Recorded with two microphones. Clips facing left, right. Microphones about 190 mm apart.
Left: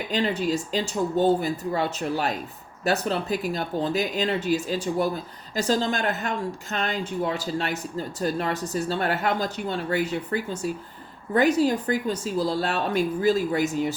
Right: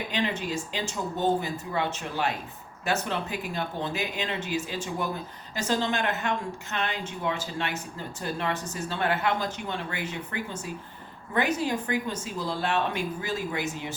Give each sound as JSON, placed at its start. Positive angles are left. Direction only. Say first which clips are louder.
{"t": 0.1, "sound": "a woman's voice", "louder": "left 7 dB", "side_deg": 35}